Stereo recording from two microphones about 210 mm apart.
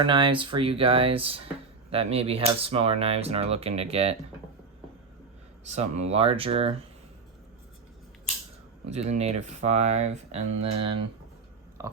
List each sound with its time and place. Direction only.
0.0 s speech: 25° right (ahead or behind)
5.6 s speech: 30° right (ahead or behind)
8.9 s speech: 30° right (ahead or behind)
11.8 s a sound: 15° right (ahead or behind)